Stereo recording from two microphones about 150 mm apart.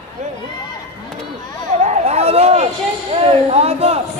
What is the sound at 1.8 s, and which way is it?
A man's voice, 45° right (ahead or behind).